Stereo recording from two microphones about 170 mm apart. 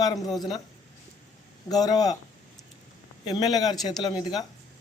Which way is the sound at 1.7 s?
20° left (ahead or behind).